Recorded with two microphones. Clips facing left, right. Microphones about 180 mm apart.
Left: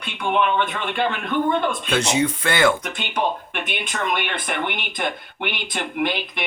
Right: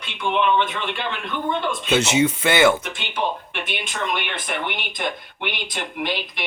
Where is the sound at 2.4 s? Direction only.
25° right (ahead or behind).